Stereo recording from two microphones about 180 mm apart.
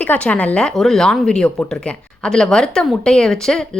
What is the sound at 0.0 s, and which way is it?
Speech, 5° left (ahead or behind).